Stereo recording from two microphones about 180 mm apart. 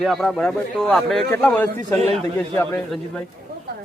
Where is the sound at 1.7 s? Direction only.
35° right (ahead or behind).